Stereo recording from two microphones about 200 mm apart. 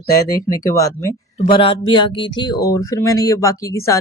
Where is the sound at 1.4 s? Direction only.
25° left (ahead or behind).